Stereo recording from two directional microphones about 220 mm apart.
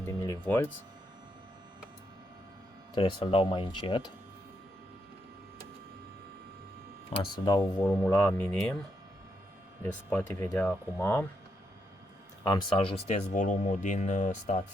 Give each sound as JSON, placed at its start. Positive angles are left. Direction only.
{"t": 0.0, "sound": "speech", "side_deg": 15}
{"t": 2.9, "sound": "speech", "side_deg": 20}
{"t": 7.2, "sound": "speech", "side_deg": 20}
{"t": 7.8, "sound": "speech", "side_deg": 5}
{"t": 9.8, "sound": "speech", "side_deg": 5}
{"t": 12.4, "sound": "speech", "side_deg": 20}